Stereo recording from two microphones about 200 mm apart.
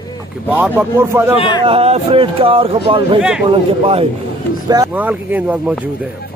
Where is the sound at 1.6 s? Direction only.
30° right (ahead or behind).